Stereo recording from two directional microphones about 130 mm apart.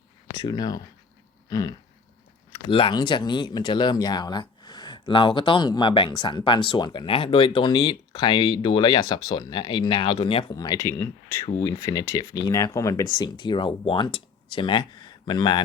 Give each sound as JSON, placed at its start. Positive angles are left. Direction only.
{"t": 0.4, "sound": "speech", "side_deg": 30}
{"t": 2.6, "sound": "speech", "side_deg": 45}
{"t": 10.5, "sound": "speech", "side_deg": 30}
{"t": 13.1, "sound": "speech", "side_deg": 35}